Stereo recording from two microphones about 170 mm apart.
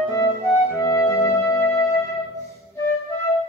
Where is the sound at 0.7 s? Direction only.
15° left (ahead or behind).